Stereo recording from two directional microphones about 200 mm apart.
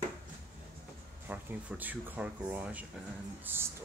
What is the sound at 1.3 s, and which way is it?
Speech, 10° right (ahead or behind).